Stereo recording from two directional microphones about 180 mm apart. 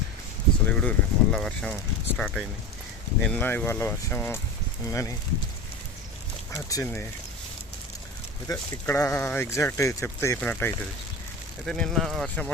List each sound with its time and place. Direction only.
0.7 s speech: 5° left (ahead or behind)
6.5 s speech: 15° left (ahead or behind)
8.4 s speech: 20° left (ahead or behind); by 12.5 s centre (ahead or behind)